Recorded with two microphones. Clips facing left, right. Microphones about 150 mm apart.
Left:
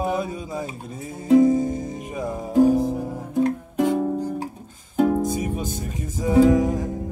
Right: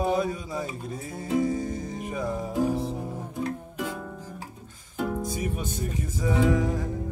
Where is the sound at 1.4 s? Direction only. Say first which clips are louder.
Left 9 dB; 25° left (ahead or behind).